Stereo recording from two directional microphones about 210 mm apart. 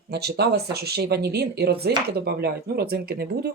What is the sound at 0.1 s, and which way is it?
Speech, 50° right (ahead or behind).